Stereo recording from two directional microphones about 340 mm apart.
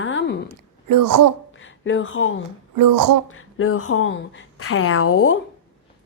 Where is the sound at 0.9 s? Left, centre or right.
Right.